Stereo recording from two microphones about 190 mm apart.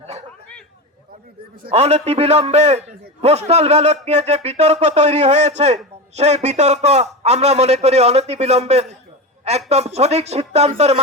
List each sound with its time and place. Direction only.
1.7 s a man's voice: 35° right (ahead or behind)